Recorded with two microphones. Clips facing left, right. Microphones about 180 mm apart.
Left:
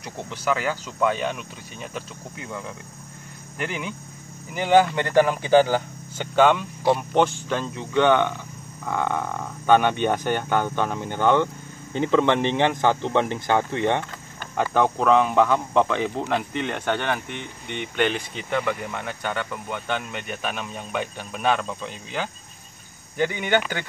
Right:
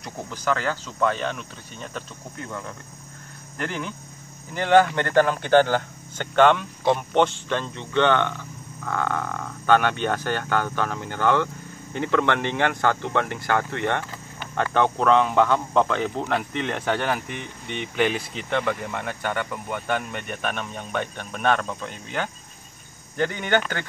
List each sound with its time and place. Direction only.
0.0 s speech: 5° left (ahead or behind)
14.6 s speech: 5° left (ahead or behind)